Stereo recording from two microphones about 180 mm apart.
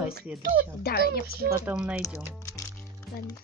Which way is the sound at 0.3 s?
5° right (ahead or behind).